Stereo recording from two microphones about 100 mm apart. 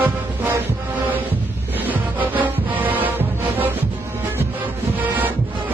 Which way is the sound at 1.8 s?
20° right (ahead or behind).